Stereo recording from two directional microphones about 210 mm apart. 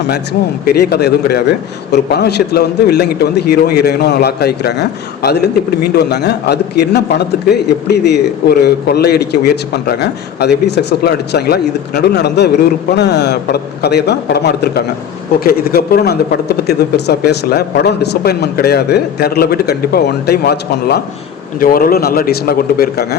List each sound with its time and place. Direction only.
0.6 s a man's voice: 50° left (ahead or behind)